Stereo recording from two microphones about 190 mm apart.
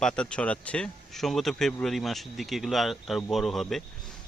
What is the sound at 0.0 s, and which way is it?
Speech, 5° left (ahead or behind).